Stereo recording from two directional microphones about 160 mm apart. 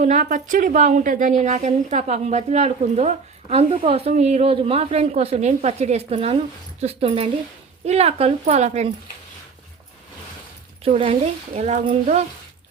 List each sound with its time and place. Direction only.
0.0 s a woman's voice: 50° right (ahead or behind)
10.8 s a woman's voice: 40° right (ahead or behind)